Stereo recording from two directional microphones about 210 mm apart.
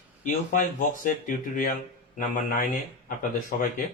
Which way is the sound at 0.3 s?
40° left (ahead or behind).